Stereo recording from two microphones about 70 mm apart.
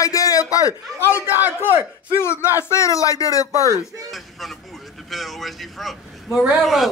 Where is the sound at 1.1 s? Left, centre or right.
Right.